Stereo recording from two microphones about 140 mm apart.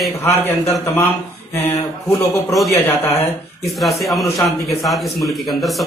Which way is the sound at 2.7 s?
15° left (ahead or behind).